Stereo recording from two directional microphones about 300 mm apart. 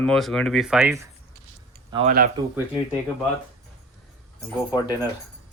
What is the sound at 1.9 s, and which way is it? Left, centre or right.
Speech, right.